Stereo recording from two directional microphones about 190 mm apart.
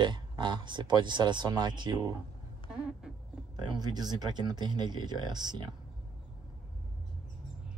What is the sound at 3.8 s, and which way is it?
Speech, 20° right (ahead or behind).